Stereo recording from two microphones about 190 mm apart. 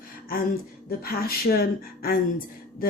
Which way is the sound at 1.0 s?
50° left (ahead or behind).